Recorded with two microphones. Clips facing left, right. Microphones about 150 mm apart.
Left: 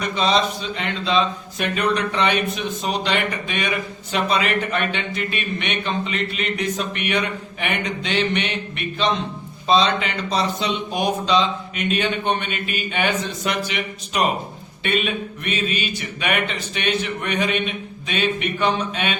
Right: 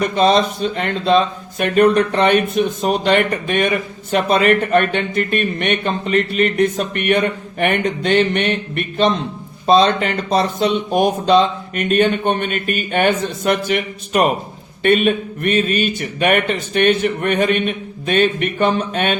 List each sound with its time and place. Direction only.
0.0 s speech: 50° right (ahead or behind)